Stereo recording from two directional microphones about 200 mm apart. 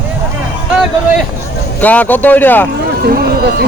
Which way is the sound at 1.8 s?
10° left (ahead or behind).